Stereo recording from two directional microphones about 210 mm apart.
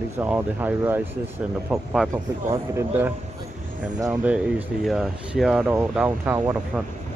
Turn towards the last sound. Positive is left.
turn(degrees=-10)  # may be behind; listen again after turning